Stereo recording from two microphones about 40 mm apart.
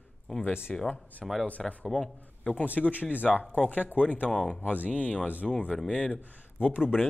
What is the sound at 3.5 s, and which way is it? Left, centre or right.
Speech, left.